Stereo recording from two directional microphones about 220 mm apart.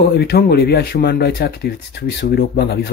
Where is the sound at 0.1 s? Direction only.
45° left (ahead or behind).